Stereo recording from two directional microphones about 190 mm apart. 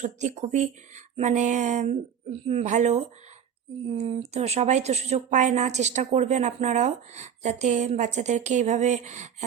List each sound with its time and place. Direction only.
0.0 s a woman's voice: 40° right (ahead or behind)